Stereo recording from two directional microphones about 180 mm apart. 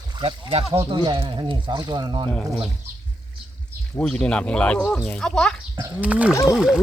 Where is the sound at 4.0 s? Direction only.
5° left (ahead or behind).